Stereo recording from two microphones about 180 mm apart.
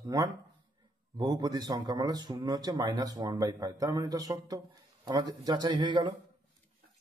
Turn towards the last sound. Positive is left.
turn(degrees=-25)  # may be behind; listen again after turning